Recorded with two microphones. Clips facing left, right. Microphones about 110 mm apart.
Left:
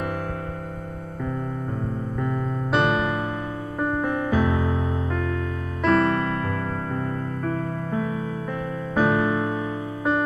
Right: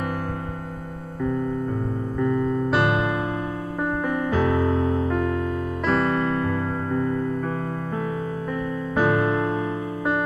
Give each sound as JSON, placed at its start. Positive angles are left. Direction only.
{"t": 2.7, "sound": "electric piano", "side_deg": -10}
{"t": 3.9, "sound": "music", "side_deg": 0}
{"t": 5.1, "sound": "music", "side_deg": -15}
{"t": 5.9, "sound": "music", "side_deg": -5}
{"t": 8.9, "sound": "music", "side_deg": -5}